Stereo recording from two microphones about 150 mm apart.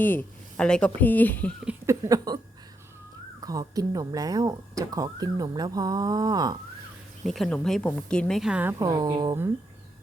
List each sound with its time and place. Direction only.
0.0 s speech: 10° left (ahead or behind)
1.9 s speech: 25° right (ahead or behind)
3.4 s speech: 25° right (ahead or behind)
7.3 s speech: centre (ahead or behind)
8.8 s speech: 25° right (ahead or behind)